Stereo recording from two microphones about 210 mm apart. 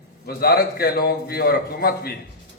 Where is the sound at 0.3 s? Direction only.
45° left (ahead or behind).